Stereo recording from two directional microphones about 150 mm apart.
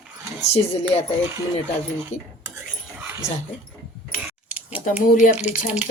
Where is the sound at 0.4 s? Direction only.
45° left (ahead or behind).